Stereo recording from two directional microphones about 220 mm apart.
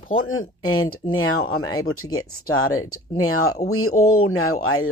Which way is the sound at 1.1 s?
70° left (ahead or behind).